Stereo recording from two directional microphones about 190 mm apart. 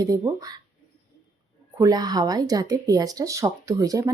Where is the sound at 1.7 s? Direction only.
20° right (ahead or behind).